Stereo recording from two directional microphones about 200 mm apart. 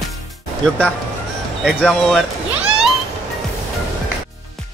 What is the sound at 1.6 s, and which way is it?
Speech, centre (ahead or behind).